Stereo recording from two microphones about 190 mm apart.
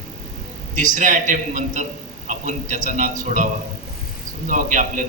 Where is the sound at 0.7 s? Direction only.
40° right (ahead or behind).